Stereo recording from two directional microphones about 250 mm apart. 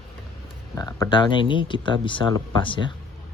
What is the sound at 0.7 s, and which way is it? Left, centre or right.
Speech, centre.